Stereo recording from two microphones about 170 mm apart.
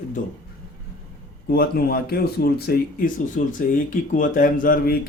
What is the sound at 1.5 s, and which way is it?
Speech, 60° left (ahead or behind).